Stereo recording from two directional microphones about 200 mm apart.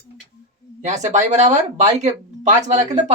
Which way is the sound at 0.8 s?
35° right (ahead or behind).